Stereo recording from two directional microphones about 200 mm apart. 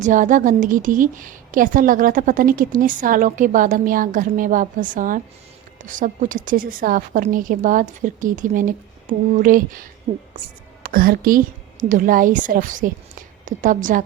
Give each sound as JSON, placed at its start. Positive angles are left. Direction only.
{"t": 0.0, "sound": "a woman's voice", "side_deg": -40}